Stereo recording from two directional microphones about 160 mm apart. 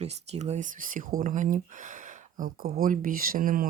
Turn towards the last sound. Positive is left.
turn(degrees=-60)  # may be behind; listen again after turning